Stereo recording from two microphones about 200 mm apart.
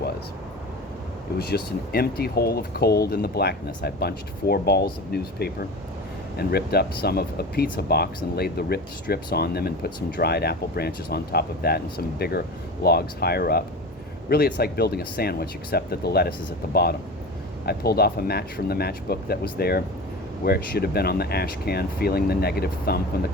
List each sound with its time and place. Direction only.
1.4 s speech: 50° left (ahead or behind)